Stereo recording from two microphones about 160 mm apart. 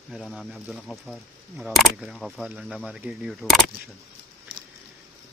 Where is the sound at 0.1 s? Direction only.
Centre (ahead or behind).